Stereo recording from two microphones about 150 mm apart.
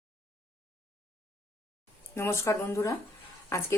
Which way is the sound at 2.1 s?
15° left (ahead or behind).